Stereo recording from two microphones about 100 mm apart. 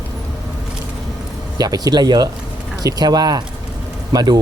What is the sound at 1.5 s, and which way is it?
Speech, 40° right (ahead or behind).